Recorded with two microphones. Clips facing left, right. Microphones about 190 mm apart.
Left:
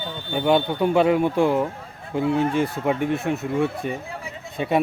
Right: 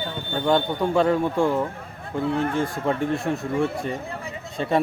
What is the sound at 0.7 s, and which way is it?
A man's voice, 20° left (ahead or behind).